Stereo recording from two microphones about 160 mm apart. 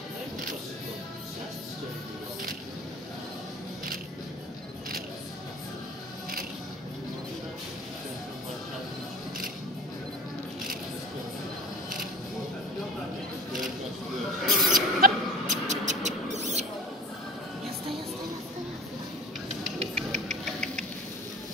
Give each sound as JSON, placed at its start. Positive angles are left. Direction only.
{"t": 14.4, "sound": "rodents", "side_deg": 0}
{"t": 15.0, "sound": "rodents", "side_deg": -55}
{"t": 19.8, "sound": "music", "side_deg": -40}